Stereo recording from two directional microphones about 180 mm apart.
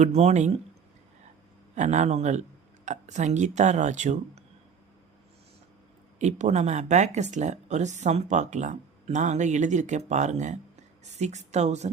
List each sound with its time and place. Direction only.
0.0 s speech: 35° right (ahead or behind)
1.7 s speech: 40° right (ahead or behind)
6.1 s speech: 40° right (ahead or behind)